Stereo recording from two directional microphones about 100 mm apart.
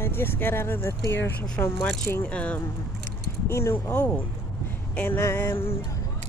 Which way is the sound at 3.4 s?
25° left (ahead or behind).